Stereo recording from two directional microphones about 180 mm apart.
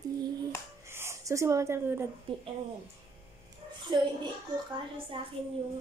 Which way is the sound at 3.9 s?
25° right (ahead or behind).